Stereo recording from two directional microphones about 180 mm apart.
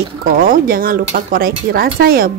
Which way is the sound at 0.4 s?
50° right (ahead or behind).